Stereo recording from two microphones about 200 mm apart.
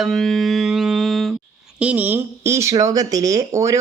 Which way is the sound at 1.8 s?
5° right (ahead or behind).